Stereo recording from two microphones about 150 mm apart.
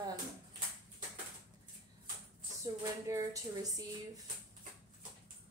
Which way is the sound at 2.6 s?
20° right (ahead or behind).